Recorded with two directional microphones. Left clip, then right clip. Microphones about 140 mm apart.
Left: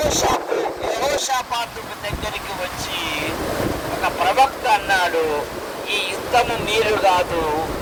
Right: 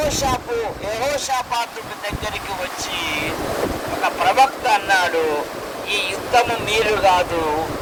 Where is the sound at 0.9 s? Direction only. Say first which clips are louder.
Even; 25° right (ahead or behind).